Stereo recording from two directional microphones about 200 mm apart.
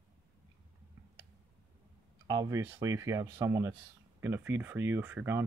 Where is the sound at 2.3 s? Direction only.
20° right (ahead or behind).